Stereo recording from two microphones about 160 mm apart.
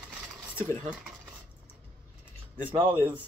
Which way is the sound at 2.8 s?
30° right (ahead or behind).